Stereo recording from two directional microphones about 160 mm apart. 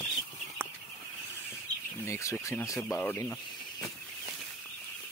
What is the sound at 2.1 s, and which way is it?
Speech, 20° left (ahead or behind).